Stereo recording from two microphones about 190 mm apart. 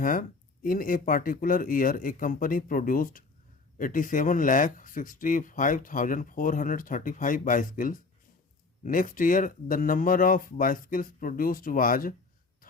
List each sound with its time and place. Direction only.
0.0 s speech: 45° left (ahead or behind)